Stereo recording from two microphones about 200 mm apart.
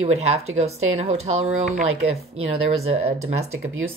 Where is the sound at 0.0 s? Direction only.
30° right (ahead or behind).